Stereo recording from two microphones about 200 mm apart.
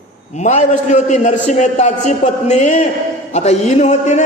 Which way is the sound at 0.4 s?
35° left (ahead or behind).